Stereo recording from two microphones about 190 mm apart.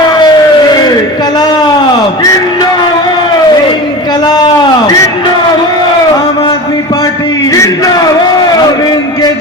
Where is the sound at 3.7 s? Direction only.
25° left (ahead or behind).